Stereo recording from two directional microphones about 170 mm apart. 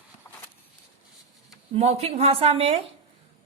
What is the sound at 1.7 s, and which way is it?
Speech, 35° right (ahead or behind).